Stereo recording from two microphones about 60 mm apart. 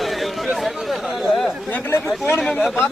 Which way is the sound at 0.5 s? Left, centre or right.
Centre.